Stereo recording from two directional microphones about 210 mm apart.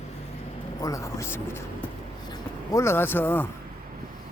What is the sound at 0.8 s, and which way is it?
Speech, 15° left (ahead or behind).